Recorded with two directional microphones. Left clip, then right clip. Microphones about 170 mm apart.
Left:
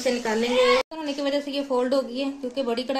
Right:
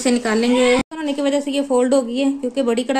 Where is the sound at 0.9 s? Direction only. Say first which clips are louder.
Right 6 dB; 40° right (ahead or behind).